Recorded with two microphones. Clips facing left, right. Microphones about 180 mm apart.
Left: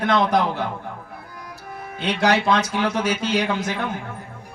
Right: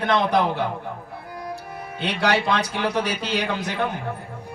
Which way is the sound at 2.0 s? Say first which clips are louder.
Left 2 dB; 45° left (ahead or behind).